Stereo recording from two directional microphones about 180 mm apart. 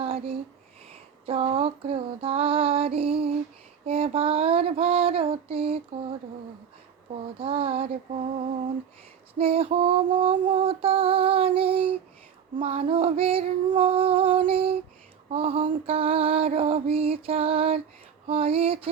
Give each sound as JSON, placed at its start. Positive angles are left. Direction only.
{"t": 0.0, "sound": "a sound", "side_deg": -30}
{"t": 1.2, "sound": "music", "side_deg": -30}
{"t": 7.3, "sound": "music", "side_deg": -30}
{"t": 9.4, "sound": "music", "side_deg": -35}